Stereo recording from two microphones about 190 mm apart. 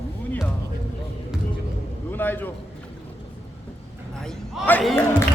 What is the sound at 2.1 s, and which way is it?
Speech, 10° left (ahead or behind).